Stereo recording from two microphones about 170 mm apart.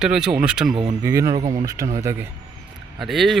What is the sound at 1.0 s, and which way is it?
Speech, 20° right (ahead or behind).